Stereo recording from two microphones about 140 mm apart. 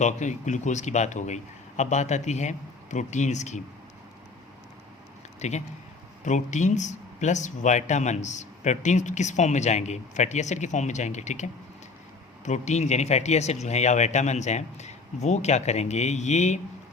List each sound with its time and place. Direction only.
0.0 s speech: 60° left (ahead or behind)
5.4 s speech: 55° left (ahead or behind)
12.5 s speech: 55° left (ahead or behind)